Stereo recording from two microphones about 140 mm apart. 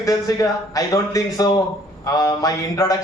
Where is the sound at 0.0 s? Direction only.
25° left (ahead or behind).